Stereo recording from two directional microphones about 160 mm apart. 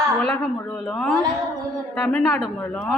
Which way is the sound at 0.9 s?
5° left (ahead or behind).